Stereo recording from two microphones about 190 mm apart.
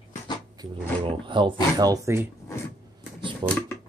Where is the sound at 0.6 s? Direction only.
25° right (ahead or behind).